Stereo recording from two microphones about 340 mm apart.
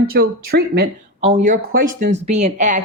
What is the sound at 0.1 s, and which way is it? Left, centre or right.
Speech, right.